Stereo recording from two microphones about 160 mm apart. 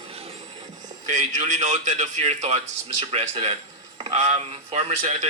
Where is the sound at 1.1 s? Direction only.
50° right (ahead or behind).